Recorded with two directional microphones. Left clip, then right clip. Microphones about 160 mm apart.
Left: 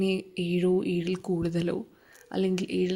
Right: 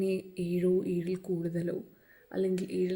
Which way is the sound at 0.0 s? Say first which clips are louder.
Left 3 dB; 30° left (ahead or behind).